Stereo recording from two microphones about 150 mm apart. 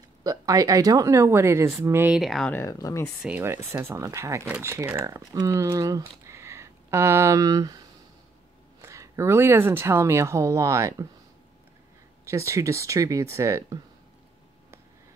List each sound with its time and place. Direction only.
0.2 s speech: 20° right (ahead or behind)
2.1 s speech: centre (ahead or behind)
2.5 s speech: 20° left (ahead or behind)
3.2 s speech: 10° right (ahead or behind)
8.8 s speech: 20° right (ahead or behind)
12.3 s speech: 20° right (ahead or behind)